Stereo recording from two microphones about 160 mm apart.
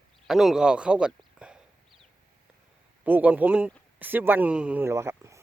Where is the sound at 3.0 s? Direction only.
10° right (ahead or behind).